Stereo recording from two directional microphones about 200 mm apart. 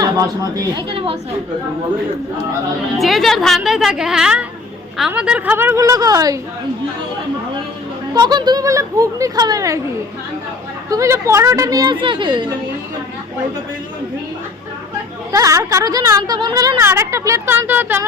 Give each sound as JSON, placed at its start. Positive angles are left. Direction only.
{"t": 0.0, "sound": "a woman's voice", "side_deg": -20}
{"t": 3.0, "sound": "a woman's voice", "side_deg": 0}
{"t": 8.1, "sound": "a woman's voice", "side_deg": -20}
{"t": 10.8, "sound": "a woman's voice", "side_deg": -15}
{"t": 15.3, "sound": "a woman's voice", "side_deg": -15}